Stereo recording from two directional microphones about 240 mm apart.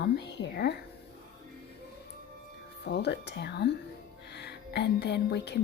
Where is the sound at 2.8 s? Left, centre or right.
Left.